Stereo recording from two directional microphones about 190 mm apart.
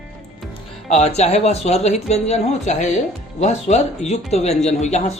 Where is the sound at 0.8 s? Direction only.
35° left (ahead or behind).